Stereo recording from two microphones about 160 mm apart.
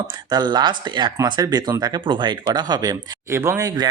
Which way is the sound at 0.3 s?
25° right (ahead or behind).